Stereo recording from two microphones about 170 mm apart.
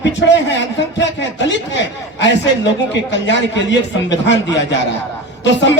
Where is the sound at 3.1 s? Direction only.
90° left.